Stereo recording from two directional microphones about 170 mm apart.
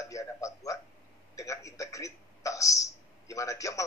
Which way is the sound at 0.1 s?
20° left (ahead or behind).